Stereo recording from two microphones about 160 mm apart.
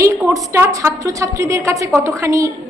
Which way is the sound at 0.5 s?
15° right (ahead or behind).